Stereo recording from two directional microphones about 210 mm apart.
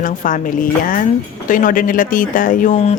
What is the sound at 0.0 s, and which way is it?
Speech, 40° left (ahead or behind).